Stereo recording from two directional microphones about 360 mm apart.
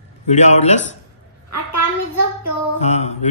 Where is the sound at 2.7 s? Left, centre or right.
Centre.